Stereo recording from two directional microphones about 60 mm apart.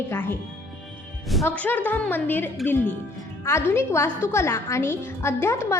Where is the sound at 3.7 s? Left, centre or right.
Left.